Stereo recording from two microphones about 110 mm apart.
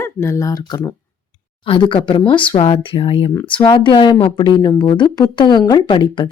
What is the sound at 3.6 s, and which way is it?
A woman's voice, 45° left (ahead or behind).